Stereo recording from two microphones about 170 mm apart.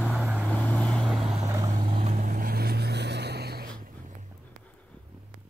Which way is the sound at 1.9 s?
35° right (ahead or behind).